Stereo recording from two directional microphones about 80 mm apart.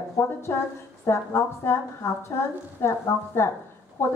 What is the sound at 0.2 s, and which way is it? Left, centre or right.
A woman's voice, left.